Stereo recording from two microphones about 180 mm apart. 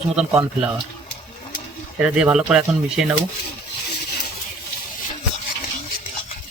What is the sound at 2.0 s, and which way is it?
Speech, 5° right (ahead or behind).